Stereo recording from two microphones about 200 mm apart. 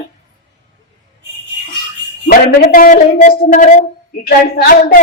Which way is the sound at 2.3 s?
45° left (ahead or behind).